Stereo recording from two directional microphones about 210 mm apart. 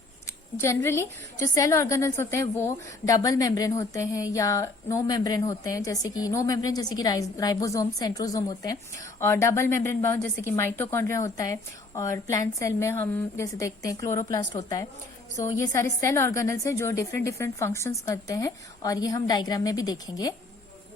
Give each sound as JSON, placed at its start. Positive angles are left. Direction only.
{"t": 0.3, "sound": "a woman's voice", "side_deg": 15}